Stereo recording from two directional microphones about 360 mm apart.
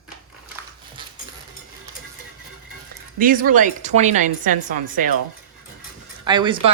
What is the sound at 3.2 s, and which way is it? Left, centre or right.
Speech, right.